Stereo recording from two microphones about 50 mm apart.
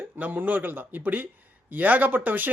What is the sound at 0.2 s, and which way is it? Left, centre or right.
A man's voice, right.